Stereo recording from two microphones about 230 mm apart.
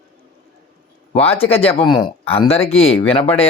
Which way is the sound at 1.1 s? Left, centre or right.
Left.